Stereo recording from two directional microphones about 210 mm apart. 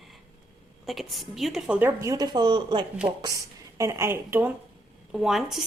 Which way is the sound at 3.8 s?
15° right (ahead or behind).